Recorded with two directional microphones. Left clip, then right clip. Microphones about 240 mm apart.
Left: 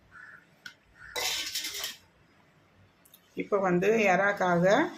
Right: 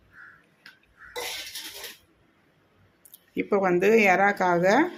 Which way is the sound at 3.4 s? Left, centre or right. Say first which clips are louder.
Right 4 dB; right.